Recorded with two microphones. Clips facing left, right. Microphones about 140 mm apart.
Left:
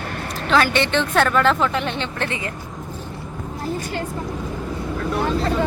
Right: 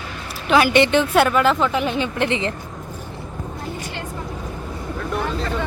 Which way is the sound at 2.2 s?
20° right (ahead or behind).